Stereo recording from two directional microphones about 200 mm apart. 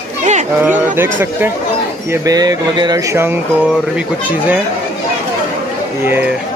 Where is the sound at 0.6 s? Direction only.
10° right (ahead or behind).